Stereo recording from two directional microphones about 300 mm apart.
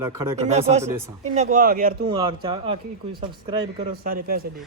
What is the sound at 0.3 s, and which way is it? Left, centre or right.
Speech, right.